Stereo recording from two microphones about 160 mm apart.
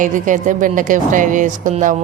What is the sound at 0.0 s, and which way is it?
A woman's voice, 55° right (ahead or behind).